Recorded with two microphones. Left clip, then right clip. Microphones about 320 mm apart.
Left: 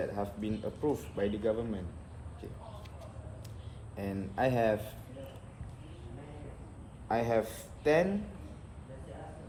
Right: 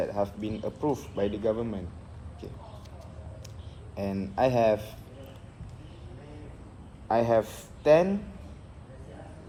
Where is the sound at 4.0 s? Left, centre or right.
Centre.